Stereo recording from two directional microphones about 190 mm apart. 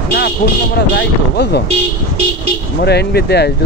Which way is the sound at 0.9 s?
60° left (ahead or behind).